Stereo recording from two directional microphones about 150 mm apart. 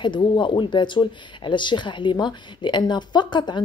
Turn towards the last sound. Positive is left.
turn(degrees=30)  # may be behind; listen again after turning